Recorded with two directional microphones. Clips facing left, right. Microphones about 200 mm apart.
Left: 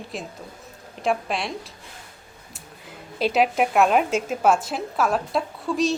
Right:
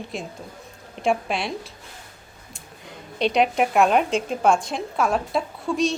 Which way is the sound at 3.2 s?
5° left (ahead or behind).